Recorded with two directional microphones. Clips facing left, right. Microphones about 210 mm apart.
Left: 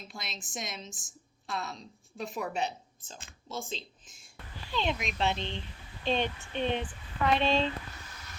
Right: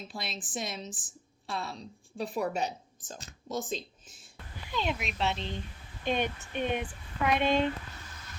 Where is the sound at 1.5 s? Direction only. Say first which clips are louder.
Right 1 dB; 30° right (ahead or behind).